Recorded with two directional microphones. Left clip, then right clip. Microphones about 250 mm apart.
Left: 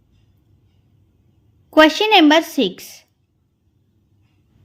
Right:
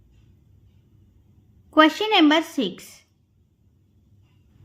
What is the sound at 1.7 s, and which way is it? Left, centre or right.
A woman's voice, centre.